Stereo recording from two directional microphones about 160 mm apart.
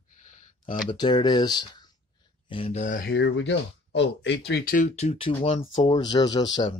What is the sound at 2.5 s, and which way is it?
Speech, 40° left (ahead or behind).